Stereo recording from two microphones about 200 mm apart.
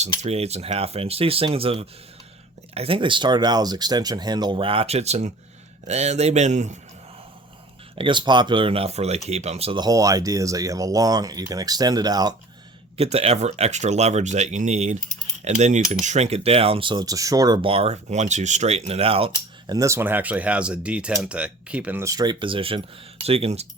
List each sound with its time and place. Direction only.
0.2 s speech: 30° right (ahead or behind)
7.9 s speech: 25° right (ahead or behind)
13.0 s speech: 30° right (ahead or behind)
19.6 s speech: 15° right (ahead or behind)